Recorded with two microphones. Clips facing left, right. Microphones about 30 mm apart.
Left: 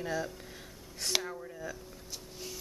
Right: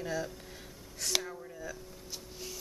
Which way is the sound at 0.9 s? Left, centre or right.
Centre.